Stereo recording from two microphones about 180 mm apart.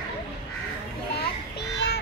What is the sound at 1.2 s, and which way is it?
Children playing, 65° left (ahead or behind).